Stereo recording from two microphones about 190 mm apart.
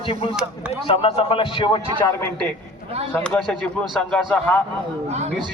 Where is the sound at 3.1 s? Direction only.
5° left (ahead or behind).